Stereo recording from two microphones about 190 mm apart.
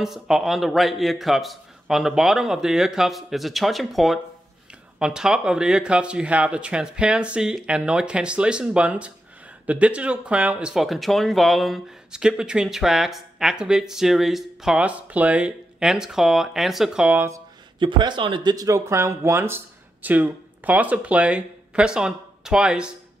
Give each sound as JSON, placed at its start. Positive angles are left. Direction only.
{"t": 0.0, "sound": "speech", "side_deg": 0}
{"t": 17.7, "sound": "speech", "side_deg": -25}